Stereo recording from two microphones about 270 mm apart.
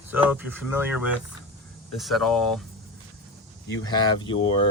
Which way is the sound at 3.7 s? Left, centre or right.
Centre.